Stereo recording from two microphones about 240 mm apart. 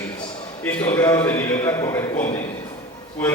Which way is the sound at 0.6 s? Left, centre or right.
Centre.